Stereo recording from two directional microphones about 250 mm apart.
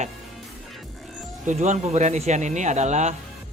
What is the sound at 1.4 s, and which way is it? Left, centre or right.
Speech, right.